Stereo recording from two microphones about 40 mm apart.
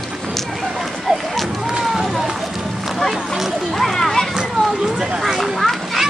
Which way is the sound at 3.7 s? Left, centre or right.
Centre.